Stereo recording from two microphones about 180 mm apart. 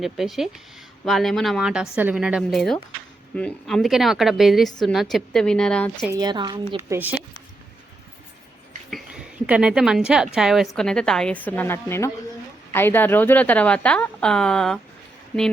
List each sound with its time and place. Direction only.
0.0 s a woman's voice: centre (ahead or behind)
6.1 s a woman's voice: 20° right (ahead or behind)
8.9 s a woman's voice: centre (ahead or behind)